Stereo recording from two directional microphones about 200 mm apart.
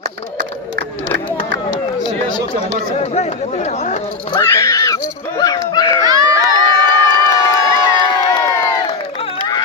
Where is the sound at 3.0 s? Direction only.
35° left (ahead or behind).